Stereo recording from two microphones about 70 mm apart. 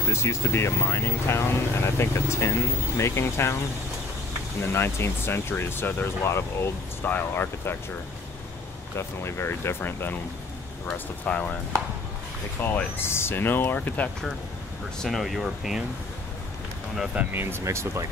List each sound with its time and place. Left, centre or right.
0.1 s speech: left
4.6 s speech: left
8.9 s speech: left
10.9 s speech: centre
12.5 s speech: left
15.0 s speech: centre
17.3 s speech: right